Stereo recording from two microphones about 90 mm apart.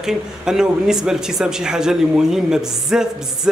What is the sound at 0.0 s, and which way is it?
Speech, 5° right (ahead or behind).